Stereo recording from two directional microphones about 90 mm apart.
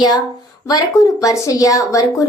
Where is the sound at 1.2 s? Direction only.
40° left (ahead or behind).